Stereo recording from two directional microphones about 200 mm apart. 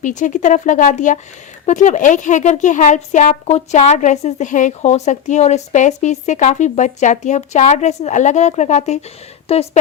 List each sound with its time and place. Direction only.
0.0 s speech: 40° left (ahead or behind)